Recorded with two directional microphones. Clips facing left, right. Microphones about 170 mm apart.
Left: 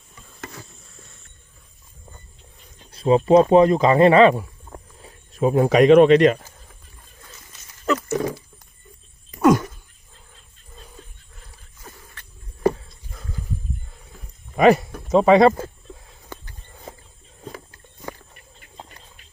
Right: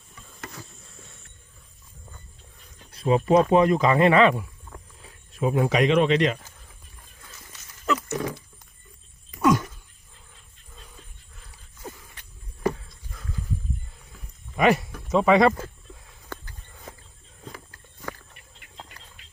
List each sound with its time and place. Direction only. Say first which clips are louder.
2.7 s speech: left 5 dB; 30° left (ahead or behind); by 6.5 s 50° left (ahead or behind)
8.0 s dog: left 5 dB; 35° left (ahead or behind)
9.4 s a sound: left 5 dB; 50° left (ahead or behind)
14.5 s wild animals: left 6 dB; 35° left (ahead or behind)